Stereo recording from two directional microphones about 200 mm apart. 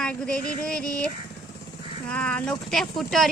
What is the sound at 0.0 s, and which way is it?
Speech, 5° left (ahead or behind).